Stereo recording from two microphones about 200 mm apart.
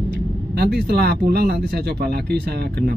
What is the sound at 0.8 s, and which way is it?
Speech, 55° right (ahead or behind).